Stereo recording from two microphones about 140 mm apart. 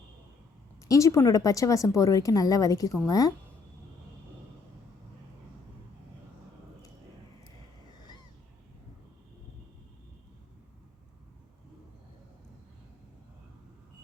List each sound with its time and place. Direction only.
0.9 s a woman's voice: 20° left (ahead or behind)